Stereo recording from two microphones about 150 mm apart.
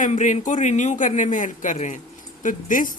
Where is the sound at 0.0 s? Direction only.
55° left (ahead or behind).